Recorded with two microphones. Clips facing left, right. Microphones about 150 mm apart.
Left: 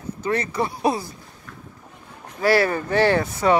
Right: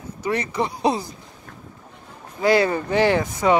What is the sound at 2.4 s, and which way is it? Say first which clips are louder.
Speech: right 1 dB; 20° right (ahead or behind).